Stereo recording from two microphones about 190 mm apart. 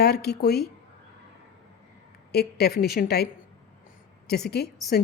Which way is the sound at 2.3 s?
60° left (ahead or behind).